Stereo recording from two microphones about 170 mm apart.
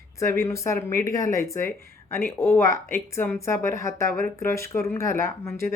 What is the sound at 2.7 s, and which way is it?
Speech, 50° right (ahead or behind).